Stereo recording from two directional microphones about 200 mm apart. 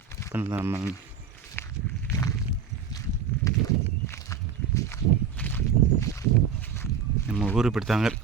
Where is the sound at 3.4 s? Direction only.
15° left (ahead or behind).